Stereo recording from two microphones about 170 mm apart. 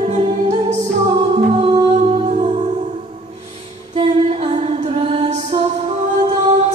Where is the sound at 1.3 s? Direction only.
30° right (ahead or behind).